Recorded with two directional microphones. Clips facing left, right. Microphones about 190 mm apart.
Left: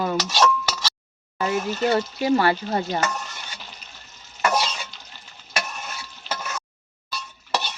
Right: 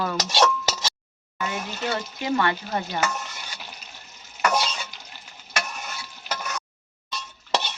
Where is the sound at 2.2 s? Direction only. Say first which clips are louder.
Left 2 dB; 35° left (ahead or behind).